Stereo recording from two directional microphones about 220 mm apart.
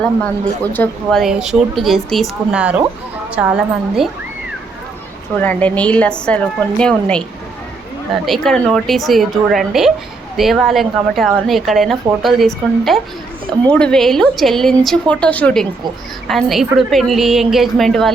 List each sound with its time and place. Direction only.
0.0 s speech: 5° left (ahead or behind)
5.4 s speech: 5° left (ahead or behind)